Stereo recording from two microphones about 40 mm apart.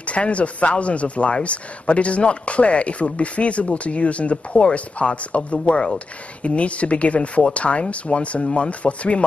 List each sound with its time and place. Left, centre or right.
0.0 s speech: left